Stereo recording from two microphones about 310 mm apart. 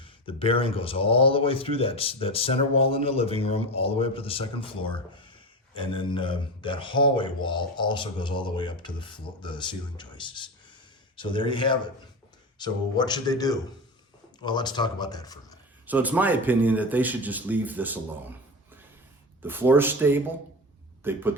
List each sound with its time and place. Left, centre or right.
0.0 s speech: centre
15.9 s speech: centre
19.4 s speech: centre